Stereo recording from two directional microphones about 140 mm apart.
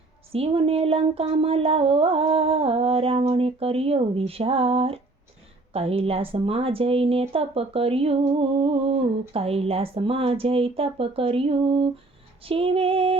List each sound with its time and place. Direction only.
0.3 s speech: 45° right (ahead or behind)
12.5 s female singing: 40° right (ahead or behind)